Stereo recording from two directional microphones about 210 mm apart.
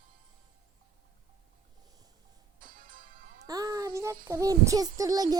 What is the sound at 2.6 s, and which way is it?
Music, 40° right (ahead or behind).